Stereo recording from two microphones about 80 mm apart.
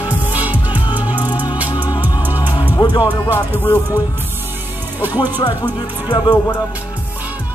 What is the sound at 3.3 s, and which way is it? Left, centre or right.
Speech, left.